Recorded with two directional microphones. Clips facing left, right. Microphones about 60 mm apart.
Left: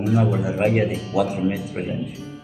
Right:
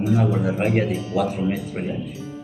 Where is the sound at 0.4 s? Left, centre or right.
Centre.